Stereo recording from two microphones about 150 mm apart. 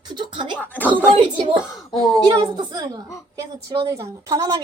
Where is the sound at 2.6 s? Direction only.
25° right (ahead or behind).